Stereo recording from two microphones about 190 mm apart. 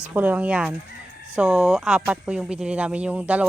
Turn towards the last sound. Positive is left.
turn(degrees=-10)  # may be behind; listen again after turning